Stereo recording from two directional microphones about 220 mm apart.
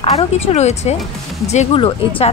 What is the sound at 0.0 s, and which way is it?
Speech, 30° left (ahead or behind).